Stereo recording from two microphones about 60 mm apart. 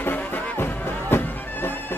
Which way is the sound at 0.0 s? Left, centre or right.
Left.